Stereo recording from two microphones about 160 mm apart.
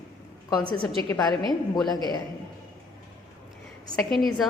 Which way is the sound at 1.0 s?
20° left (ahead or behind).